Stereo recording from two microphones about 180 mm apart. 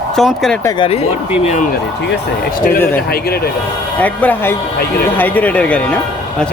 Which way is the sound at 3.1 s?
60° left (ahead or behind).